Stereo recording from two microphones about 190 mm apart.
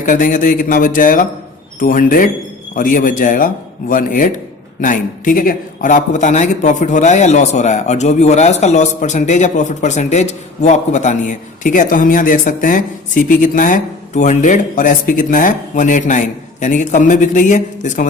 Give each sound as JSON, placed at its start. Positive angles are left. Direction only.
{"t": 0.0, "sound": "a man's voice", "side_deg": 45}